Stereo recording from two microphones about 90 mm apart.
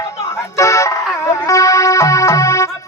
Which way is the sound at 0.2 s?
35° left (ahead or behind).